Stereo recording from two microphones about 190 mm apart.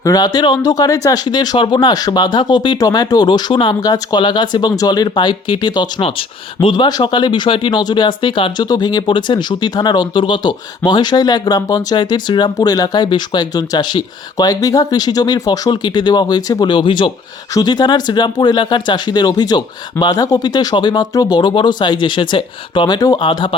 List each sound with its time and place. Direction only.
0.0 s speech: 20° left (ahead or behind)